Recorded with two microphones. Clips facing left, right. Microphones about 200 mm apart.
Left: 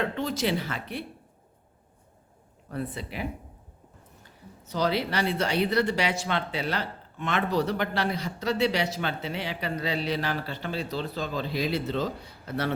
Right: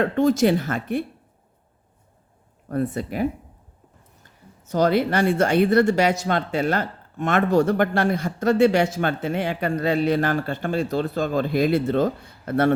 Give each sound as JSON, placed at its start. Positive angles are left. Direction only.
{"t": 0.0, "sound": "speech", "side_deg": -45}
{"t": 2.6, "sound": "speech", "side_deg": -45}